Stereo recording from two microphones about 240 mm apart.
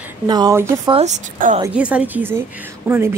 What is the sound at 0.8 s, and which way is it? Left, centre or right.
Speech, right.